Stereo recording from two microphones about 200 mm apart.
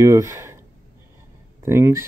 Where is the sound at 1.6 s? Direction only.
15° right (ahead or behind).